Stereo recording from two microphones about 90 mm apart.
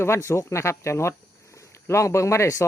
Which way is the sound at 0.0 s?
30° left (ahead or behind).